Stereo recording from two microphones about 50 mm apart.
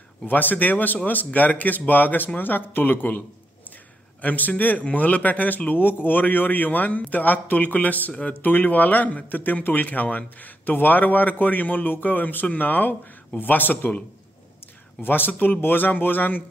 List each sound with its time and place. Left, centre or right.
0.3 s a man's voice: left
15.0 s a man's voice: left